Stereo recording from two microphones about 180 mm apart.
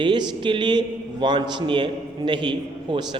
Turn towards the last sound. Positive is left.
turn(degrees=-25)  # may be behind; listen again after turning